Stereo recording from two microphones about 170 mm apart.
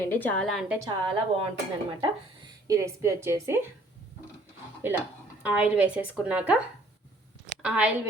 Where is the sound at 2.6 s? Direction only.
20° right (ahead or behind).